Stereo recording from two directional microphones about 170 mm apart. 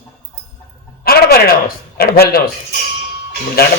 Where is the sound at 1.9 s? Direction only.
65° left (ahead or behind).